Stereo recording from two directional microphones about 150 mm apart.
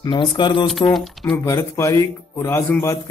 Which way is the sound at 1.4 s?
20° left (ahead or behind).